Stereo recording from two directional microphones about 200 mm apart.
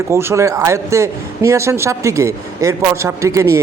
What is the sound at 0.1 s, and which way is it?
A man's voice, 15° right (ahead or behind).